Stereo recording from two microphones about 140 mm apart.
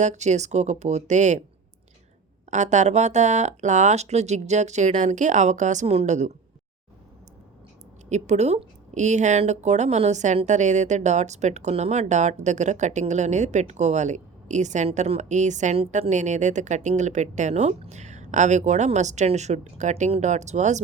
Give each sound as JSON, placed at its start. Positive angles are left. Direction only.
{"t": 0.0, "sound": "a woman's voice", "side_deg": -55}
{"t": 2.5, "sound": "a woman's voice", "side_deg": -60}
{"t": 8.1, "sound": "a woman's voice", "side_deg": -55}